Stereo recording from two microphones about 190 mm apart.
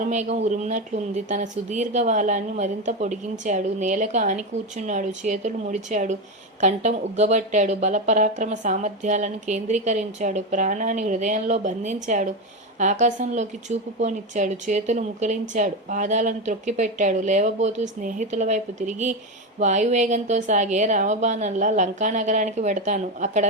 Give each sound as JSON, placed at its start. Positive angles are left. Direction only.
{"t": 0.0, "sound": "a woman's voice", "side_deg": -40}